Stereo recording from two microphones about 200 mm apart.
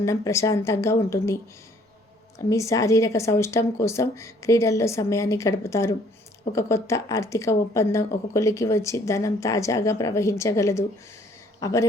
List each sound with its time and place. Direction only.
0.0 s speech: 15° left (ahead or behind)
2.5 s speech: 15° left (ahead or behind)